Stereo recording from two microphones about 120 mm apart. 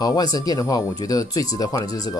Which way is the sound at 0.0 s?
35° left (ahead or behind).